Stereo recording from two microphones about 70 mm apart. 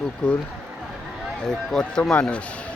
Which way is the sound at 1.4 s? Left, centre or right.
Centre.